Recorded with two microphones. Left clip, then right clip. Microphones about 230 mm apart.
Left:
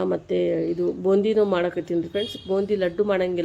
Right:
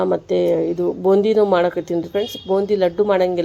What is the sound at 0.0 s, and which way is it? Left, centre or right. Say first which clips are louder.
Speech: right 6 dB; centre.